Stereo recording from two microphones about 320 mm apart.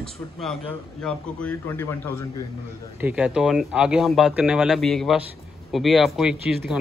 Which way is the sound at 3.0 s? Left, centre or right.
Centre.